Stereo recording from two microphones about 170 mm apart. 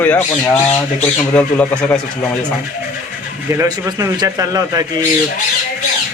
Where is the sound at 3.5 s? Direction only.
15° right (ahead or behind).